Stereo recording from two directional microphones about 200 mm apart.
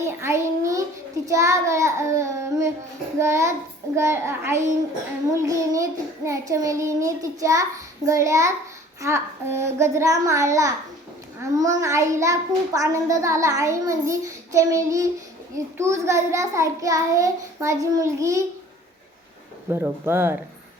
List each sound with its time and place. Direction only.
0.0 s a sound: 15° right (ahead or behind)
3.2 s a child's voice: 15° right (ahead or behind)
19.7 s a child's voice: 10° right (ahead or behind)